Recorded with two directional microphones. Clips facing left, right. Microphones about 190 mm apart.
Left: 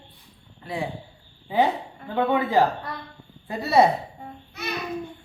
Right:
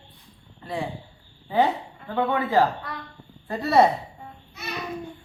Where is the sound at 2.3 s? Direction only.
15° left (ahead or behind).